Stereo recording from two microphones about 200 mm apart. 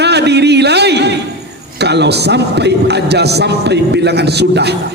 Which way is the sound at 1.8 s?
55° right (ahead or behind).